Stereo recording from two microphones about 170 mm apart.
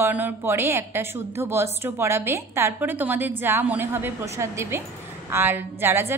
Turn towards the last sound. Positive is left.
turn(degrees=-15)  # may be behind; listen again after turning